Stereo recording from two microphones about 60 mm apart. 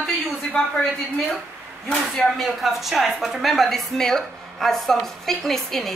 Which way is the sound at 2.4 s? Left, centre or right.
Centre.